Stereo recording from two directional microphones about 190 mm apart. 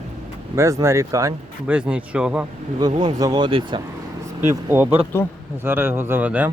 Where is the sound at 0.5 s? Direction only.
15° right (ahead or behind).